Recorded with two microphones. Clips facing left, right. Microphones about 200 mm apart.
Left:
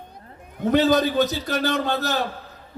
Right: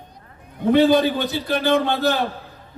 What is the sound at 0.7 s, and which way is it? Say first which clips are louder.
A man's voice: right 2 dB; 45° left (ahead or behind).